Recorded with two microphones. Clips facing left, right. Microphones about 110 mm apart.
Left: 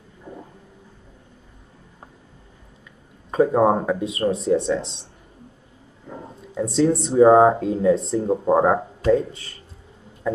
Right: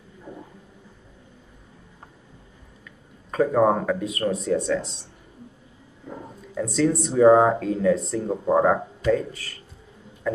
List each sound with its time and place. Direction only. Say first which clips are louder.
3.3 s speech: left 2 dB; 25° left (ahead or behind)
6.5 s speech: left 3 dB; 30° left (ahead or behind)
10.3 s a sound: left 2 dB; 25° left (ahead or behind)